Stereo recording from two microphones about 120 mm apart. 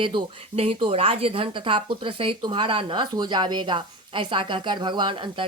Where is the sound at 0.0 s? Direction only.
45° right (ahead or behind).